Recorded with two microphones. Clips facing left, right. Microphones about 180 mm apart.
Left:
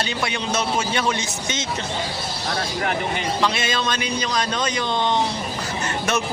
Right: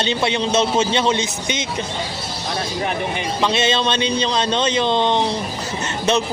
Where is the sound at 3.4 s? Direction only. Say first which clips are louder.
Right 7 dB; 20° right (ahead or behind).